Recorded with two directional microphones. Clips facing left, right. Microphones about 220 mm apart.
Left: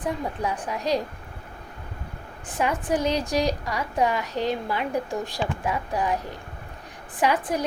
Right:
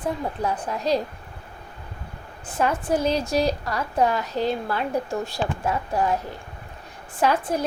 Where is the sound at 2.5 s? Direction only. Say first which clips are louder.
Right 2 dB; 15° left (ahead or behind).